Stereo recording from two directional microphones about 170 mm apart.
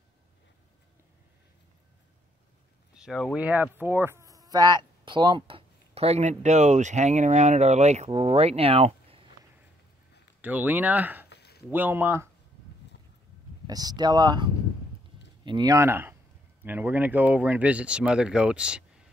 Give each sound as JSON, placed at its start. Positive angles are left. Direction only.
{"t": 3.0, "sound": "speech", "side_deg": -5}
{"t": 10.4, "sound": "speech", "side_deg": -10}
{"t": 11.2, "sound": "a sound", "side_deg": 70}
{"t": 11.7, "sound": "speech", "side_deg": -10}
{"t": 13.7, "sound": "speech", "side_deg": -25}